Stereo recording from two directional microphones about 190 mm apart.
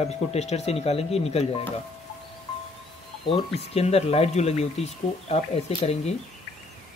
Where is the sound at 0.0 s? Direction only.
35° left (ahead or behind).